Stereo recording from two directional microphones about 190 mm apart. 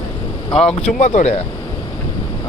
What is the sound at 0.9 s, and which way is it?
Speech, 40° left (ahead or behind).